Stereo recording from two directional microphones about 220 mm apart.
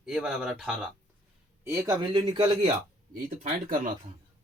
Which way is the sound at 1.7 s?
15° right (ahead or behind).